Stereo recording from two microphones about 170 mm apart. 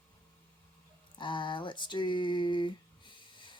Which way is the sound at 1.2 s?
30° left (ahead or behind).